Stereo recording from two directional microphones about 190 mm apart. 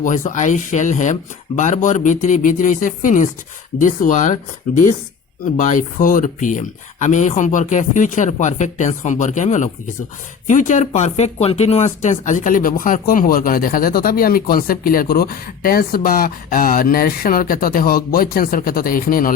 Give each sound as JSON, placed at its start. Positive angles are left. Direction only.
{"t": 0.0, "sound": "speech", "side_deg": 45}